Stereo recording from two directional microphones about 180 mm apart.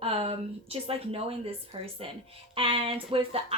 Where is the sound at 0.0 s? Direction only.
35° right (ahead or behind).